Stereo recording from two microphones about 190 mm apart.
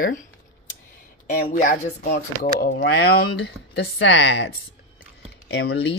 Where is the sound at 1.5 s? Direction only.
50° left (ahead or behind).